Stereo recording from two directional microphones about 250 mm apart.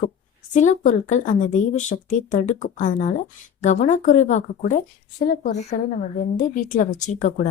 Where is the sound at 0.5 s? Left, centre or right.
Left.